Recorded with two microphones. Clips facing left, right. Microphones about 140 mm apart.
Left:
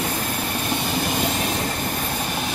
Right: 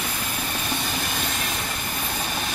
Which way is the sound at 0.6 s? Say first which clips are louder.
Left 7 dB; 25° left (ahead or behind).